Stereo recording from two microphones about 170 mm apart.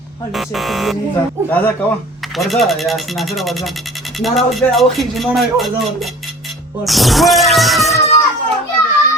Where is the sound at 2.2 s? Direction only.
Centre (ahead or behind).